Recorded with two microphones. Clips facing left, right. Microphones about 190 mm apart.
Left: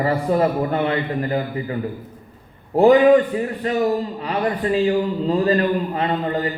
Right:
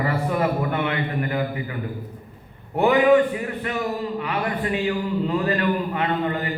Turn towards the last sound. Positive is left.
turn(degrees=30)  # may be behind; listen again after turning